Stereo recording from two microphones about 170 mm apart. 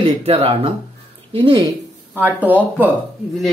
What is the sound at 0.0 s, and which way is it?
Speech, 35° right (ahead or behind).